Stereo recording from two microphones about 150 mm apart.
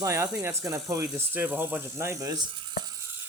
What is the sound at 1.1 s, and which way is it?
Speech, 10° right (ahead or behind).